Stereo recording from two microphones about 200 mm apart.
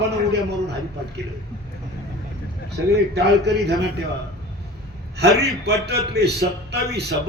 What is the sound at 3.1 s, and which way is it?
Speech, 55° right (ahead or behind).